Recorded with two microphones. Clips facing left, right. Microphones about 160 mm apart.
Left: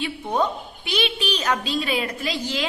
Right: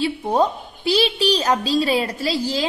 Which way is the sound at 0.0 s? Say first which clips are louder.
Right 5 dB; 35° right (ahead or behind).